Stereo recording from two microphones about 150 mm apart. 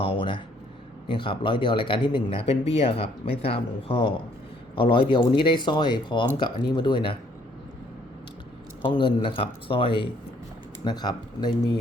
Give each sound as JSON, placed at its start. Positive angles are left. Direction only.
{"t": 0.0, "sound": "a sound", "side_deg": 35}
{"t": 1.0, "sound": "speech", "side_deg": 35}
{"t": 8.8, "sound": "speech", "side_deg": 35}